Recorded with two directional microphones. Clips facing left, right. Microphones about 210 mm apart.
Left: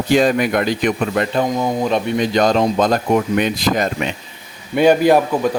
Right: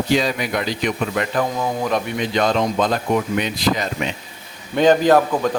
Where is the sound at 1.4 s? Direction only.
25° left (ahead or behind).